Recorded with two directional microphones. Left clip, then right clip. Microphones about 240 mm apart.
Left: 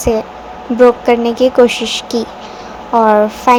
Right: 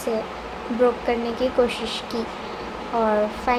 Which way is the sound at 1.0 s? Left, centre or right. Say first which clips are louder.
Left 12 dB; left.